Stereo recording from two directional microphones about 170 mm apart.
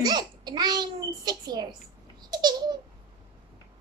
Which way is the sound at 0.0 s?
25° right (ahead or behind).